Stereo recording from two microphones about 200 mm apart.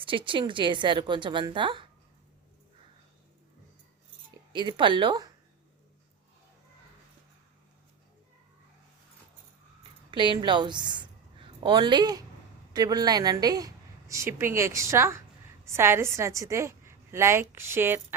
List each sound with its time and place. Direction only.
0.0 s a woman's voice: 25° right (ahead or behind)
4.5 s a woman's voice: 25° right (ahead or behind)
10.1 s a woman's voice: 25° right (ahead or behind)